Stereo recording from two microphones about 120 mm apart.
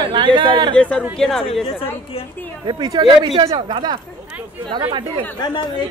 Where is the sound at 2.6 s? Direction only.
35° right (ahead or behind).